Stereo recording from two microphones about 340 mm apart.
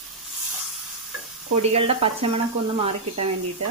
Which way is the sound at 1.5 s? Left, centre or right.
Centre.